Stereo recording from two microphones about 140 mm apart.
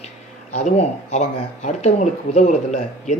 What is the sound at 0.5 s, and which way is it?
Speech, 55° left (ahead or behind).